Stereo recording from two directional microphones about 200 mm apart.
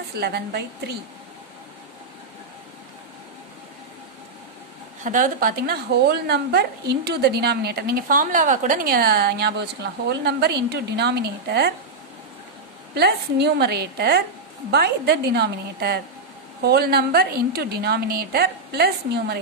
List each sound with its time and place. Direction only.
0.2 s a woman's voice: 55° right (ahead or behind)
5.0 s a woman's voice: 40° right (ahead or behind)
12.9 s a woman's voice: 55° right (ahead or behind)